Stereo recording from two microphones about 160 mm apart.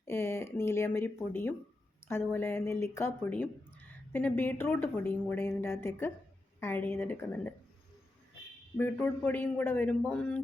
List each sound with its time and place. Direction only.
0.0 s speech: 15° left (ahead or behind)
8.8 s speech: 10° left (ahead or behind)